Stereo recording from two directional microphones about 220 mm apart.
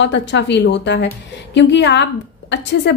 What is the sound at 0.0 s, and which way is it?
A woman's voice, 55° left (ahead or behind).